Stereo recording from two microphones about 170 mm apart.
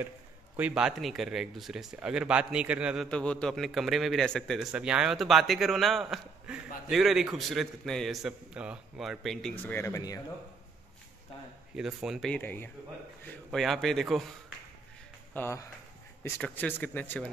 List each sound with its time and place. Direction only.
0.6 s speech: 5° right (ahead or behind); by 10.2 s 20° left (ahead or behind)
11.7 s speech: 5° right (ahead or behind)
15.3 s speech: 15° left (ahead or behind)